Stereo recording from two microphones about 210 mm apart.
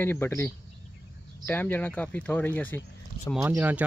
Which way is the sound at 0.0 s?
10° left (ahead or behind).